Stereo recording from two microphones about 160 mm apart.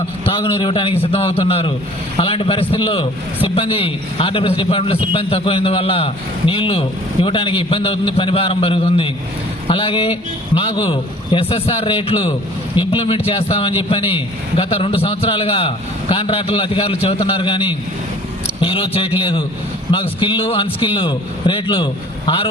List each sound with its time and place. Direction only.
0.3 s a man's voice: 30° left (ahead or behind)